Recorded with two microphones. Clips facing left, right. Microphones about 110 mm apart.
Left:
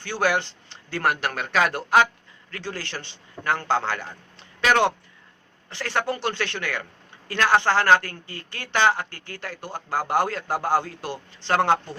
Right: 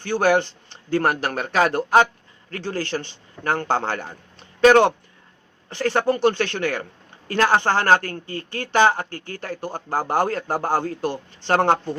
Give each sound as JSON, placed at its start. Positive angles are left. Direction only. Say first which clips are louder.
{"t": 0.0, "sound": "speech", "louder": "right 5 dB", "side_deg": -45}